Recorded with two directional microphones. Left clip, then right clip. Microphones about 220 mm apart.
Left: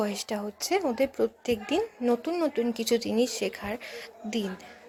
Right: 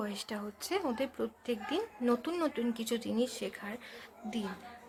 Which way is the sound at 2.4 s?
15° left (ahead or behind).